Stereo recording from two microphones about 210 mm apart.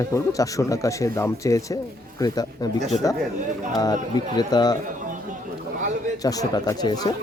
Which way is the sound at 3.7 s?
20° left (ahead or behind).